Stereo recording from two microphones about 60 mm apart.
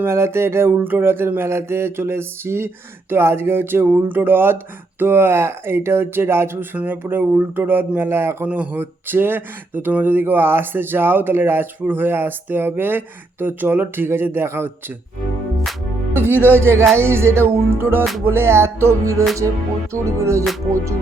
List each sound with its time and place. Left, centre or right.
0.0 s a sound: right
3.1 s speech: right
6.7 s speech: right
8.4 s speech: right
8.8 s speech: right
16.1 s speech: right
16.6 s a sound: right
19.9 s music: right